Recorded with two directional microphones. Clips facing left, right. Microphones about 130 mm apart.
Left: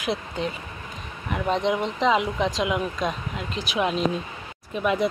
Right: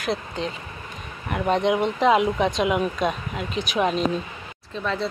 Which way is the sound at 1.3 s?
Centre (ahead or behind).